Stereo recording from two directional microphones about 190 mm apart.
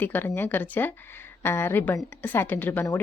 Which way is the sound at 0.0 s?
10° left (ahead or behind).